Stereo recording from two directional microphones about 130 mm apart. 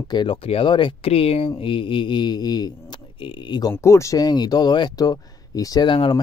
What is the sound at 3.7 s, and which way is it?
A man's voice, 20° left (ahead or behind).